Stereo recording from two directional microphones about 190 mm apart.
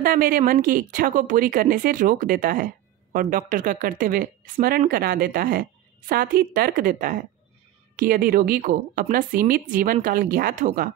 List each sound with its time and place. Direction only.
0.0 s speech: 50° right (ahead or behind)